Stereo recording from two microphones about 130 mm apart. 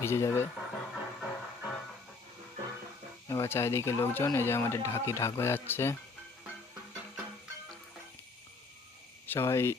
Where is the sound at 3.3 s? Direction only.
20° left (ahead or behind).